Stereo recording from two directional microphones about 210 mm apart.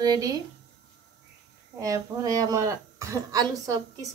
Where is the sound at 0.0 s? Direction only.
20° right (ahead or behind).